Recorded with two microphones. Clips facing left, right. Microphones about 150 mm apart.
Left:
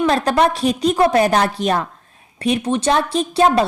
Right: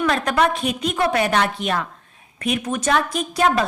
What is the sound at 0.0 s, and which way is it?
A woman's voice, 35° left (ahead or behind).